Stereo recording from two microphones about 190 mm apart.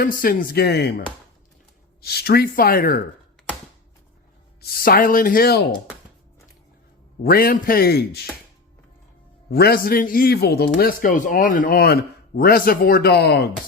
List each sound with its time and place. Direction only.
0.0 s a man's voice: 50° left (ahead or behind)
4.6 s a man's voice: 50° left (ahead or behind)
7.2 s a man's voice: 50° left (ahead or behind)
9.5 s a man's voice: 55° left (ahead or behind)